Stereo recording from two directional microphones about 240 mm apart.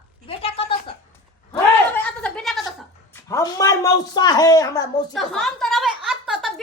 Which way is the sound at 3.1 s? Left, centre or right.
Centre.